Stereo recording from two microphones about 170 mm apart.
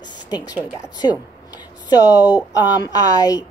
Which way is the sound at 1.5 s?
25° left (ahead or behind).